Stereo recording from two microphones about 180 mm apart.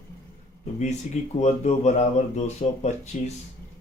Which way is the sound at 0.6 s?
40° left (ahead or behind).